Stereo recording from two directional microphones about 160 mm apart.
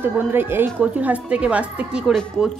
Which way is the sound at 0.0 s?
15° right (ahead or behind).